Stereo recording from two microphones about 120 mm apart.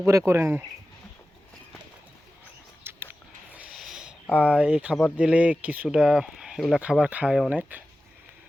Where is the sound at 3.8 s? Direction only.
5° right (ahead or behind).